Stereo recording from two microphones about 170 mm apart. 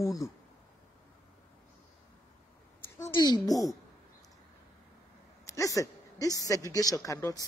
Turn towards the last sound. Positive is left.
turn(degrees=20)  # may be behind; listen again after turning